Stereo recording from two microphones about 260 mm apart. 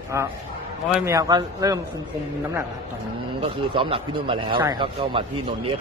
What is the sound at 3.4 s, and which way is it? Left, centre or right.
Speech, right.